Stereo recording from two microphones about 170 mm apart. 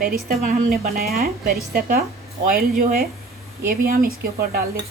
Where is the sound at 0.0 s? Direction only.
55° right (ahead or behind).